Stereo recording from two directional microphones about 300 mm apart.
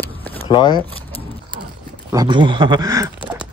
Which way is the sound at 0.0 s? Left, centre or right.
Centre.